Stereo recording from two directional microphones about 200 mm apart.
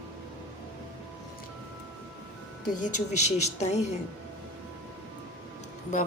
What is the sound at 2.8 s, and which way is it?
Speech, 35° left (ahead or behind).